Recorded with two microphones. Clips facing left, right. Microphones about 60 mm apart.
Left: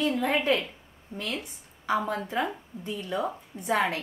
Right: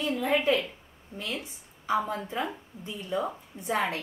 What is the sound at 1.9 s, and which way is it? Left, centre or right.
A woman's voice, left.